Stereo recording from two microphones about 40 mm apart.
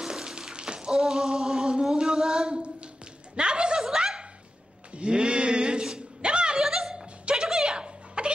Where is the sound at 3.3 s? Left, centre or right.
Right.